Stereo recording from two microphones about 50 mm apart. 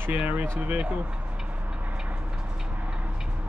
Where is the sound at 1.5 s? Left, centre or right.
Right.